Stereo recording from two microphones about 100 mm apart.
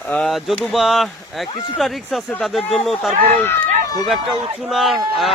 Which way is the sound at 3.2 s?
20° left (ahead or behind).